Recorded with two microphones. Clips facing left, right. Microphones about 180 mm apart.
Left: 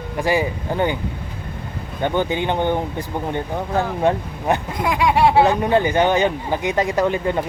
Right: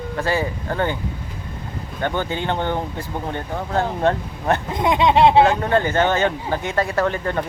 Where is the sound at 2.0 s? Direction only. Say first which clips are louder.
Left 3 dB; 15° left (ahead or behind).